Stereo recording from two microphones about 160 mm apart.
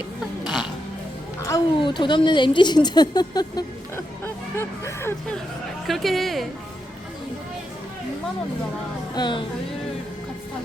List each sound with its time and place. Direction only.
0.4 s music: centre (ahead or behind)
1.5 s a woman's voice: 25° left (ahead or behind)
5.9 s a woman's voice: centre (ahead or behind)
9.1 s a woman's voice: 30° left (ahead or behind)